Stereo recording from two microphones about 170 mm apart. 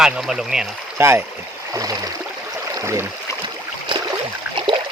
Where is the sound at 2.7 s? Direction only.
15° right (ahead or behind).